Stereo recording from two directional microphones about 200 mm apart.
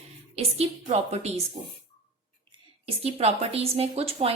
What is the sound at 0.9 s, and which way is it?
Speech, 35° right (ahead or behind).